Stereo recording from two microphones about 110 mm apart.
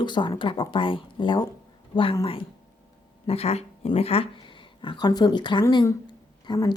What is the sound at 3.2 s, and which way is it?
Speech, 65° left (ahead or behind).